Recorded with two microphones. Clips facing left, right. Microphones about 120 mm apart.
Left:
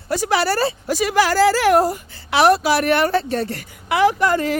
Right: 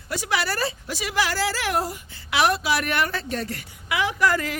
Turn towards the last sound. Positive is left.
turn(degrees=25)  # may be behind; listen again after turning